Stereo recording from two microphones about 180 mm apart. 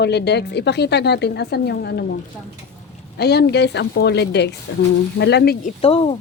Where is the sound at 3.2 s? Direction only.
65° left (ahead or behind).